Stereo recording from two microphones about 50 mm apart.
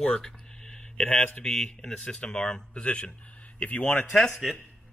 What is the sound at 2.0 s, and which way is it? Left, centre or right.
A man's voice, centre.